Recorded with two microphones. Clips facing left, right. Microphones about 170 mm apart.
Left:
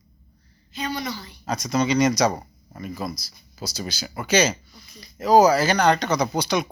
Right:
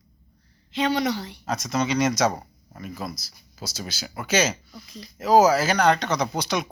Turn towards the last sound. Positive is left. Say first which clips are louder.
# left 3 dB
turn(degrees=0)  # may be behind; listen again after turning